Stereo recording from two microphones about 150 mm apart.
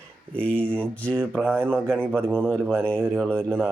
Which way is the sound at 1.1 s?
10° right (ahead or behind).